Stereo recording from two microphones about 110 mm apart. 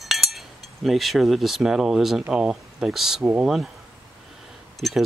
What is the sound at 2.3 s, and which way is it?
Speech, 5° right (ahead or behind).